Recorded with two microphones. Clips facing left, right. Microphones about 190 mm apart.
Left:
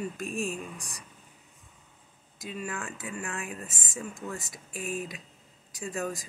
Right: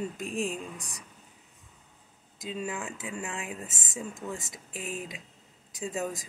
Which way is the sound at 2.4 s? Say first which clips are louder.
Right 2 dB; 20° right (ahead or behind).